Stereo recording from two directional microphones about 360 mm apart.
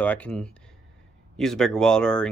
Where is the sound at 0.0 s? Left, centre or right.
Centre.